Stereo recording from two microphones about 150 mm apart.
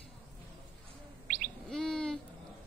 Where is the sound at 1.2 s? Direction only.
90° right.